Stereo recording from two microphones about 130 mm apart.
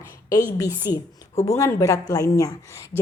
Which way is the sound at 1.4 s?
25° left (ahead or behind).